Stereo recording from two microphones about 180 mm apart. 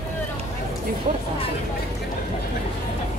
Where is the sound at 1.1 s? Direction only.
45° right (ahead or behind).